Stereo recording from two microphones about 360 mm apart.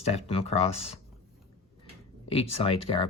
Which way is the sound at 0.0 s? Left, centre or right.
Centre.